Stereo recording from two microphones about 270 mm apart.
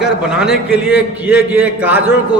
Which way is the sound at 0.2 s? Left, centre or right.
Centre.